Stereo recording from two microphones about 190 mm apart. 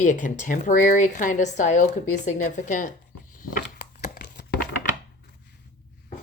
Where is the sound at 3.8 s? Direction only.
55° left (ahead or behind).